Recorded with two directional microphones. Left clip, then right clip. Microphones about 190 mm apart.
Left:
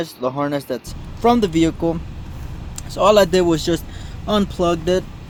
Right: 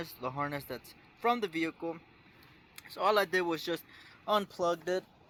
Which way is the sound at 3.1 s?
Centre (ahead or behind).